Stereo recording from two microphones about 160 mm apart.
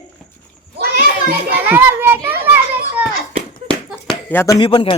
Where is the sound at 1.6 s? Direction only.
10° right (ahead or behind).